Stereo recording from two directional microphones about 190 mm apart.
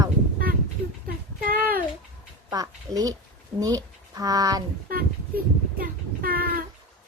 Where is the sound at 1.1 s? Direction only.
50° right (ahead or behind).